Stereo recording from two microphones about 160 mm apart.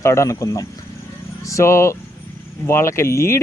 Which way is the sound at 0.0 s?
20° left (ahead or behind).